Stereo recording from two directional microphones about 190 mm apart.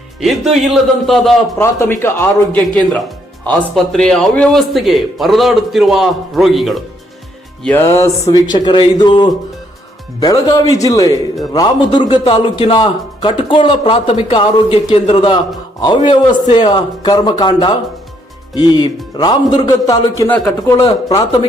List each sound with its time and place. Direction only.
0.2 s a man's voice: centre (ahead or behind)
1.5 s a man's voice: 10° left (ahead or behind)
7.6 s speech: 10° left (ahead or behind)
8.3 s a man's voice: 25° left (ahead or behind)
21.1 s a man's voice: 20° left (ahead or behind)